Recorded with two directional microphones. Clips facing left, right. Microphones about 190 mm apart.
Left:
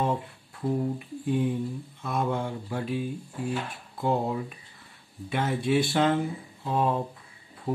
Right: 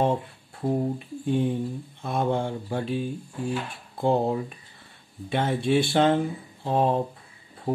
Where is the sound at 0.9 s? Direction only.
30° right (ahead or behind).